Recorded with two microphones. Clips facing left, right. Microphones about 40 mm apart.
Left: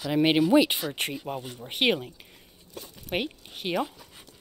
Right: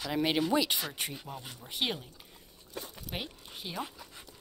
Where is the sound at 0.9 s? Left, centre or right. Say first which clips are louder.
Left 8 dB; left.